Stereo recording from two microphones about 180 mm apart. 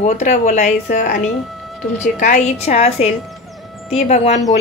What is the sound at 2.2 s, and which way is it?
A woman's voice, 40° left (ahead or behind).